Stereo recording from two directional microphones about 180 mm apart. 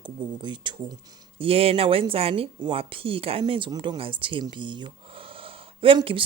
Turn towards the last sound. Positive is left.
turn(degrees=-30)  # may be behind; listen again after turning